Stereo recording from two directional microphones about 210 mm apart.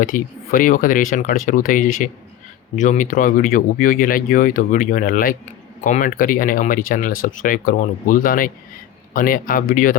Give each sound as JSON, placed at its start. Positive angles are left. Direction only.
{"t": 0.0, "sound": "speech", "side_deg": 40}